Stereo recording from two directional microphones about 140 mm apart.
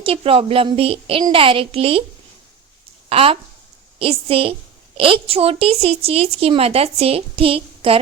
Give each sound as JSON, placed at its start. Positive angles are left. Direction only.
{"t": 0.0, "sound": "a woman's voice", "side_deg": -40}
{"t": 3.1, "sound": "a woman's voice", "side_deg": -40}